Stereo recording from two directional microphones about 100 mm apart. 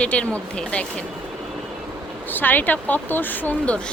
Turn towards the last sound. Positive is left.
turn(degrees=20)  # may be behind; listen again after turning